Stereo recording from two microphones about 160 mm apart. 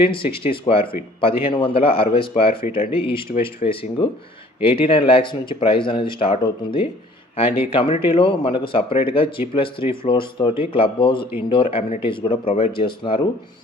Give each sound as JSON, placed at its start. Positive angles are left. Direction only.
{"t": 0.1, "sound": "speech", "side_deg": 35}